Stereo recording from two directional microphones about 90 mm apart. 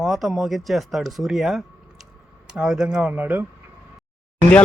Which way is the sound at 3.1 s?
20° right (ahead or behind).